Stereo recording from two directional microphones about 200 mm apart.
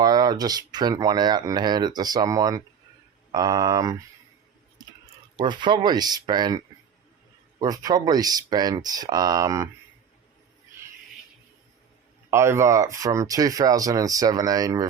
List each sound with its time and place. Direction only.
0.0 s speech: 20° right (ahead or behind)
5.4 s speech: 20° right (ahead or behind)
7.6 s speech: 20° right (ahead or behind)
12.3 s speech: 15° right (ahead or behind)